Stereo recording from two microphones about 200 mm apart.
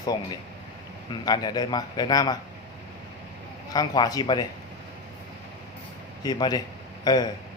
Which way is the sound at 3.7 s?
20° left (ahead or behind).